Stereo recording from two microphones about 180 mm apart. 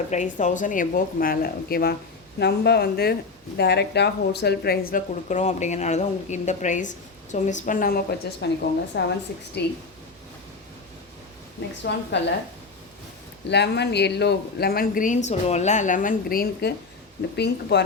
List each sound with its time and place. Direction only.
0.1 s speech: 45° left (ahead or behind)
8.9 s speech: 70° left (ahead or behind)
11.8 s speech: 75° left (ahead or behind)
13.5 s speech: 70° left (ahead or behind)
17.3 s speech: 70° left (ahead or behind)